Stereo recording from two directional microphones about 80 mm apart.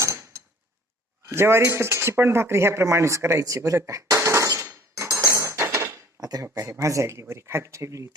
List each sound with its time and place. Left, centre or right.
0.0 s a sound: right
1.3 s speech: right
5.2 s cutlery: right
6.4 s speech: right